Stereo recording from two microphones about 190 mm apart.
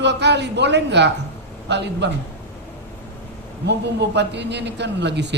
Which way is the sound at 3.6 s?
65° right (ahead or behind).